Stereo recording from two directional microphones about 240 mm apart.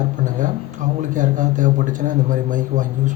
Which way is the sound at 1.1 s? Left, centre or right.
Right.